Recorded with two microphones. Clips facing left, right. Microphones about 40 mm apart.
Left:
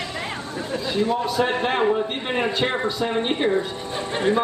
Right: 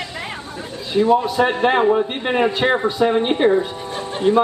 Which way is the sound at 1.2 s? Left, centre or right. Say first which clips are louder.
Right 5 dB; centre.